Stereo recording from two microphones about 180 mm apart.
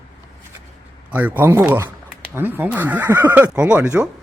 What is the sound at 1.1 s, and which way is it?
Speech, 10° right (ahead or behind).